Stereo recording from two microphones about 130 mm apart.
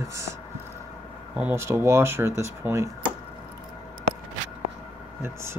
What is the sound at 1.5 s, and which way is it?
Speech, 20° right (ahead or behind).